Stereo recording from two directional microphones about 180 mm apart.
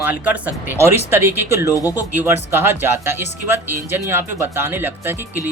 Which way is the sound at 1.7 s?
20° left (ahead or behind).